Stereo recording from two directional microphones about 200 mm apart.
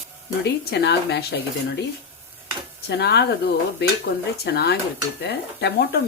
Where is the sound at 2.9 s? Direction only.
55° left (ahead or behind).